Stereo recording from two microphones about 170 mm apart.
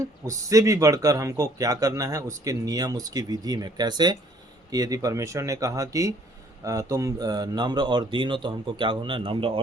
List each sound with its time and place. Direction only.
0.0 s speech: 20° right (ahead or behind)